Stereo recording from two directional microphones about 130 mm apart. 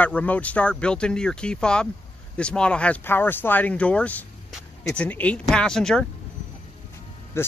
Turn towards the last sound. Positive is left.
turn(degrees=20)  # may be behind; listen again after turning